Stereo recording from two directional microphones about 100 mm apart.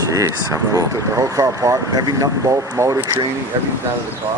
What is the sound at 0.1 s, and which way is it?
Speech, 30° right (ahead or behind).